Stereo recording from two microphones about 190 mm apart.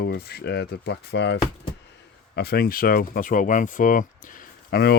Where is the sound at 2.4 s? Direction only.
55° left (ahead or behind).